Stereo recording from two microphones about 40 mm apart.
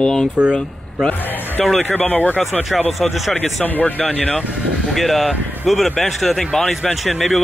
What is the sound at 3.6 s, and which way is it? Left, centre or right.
Speech, left.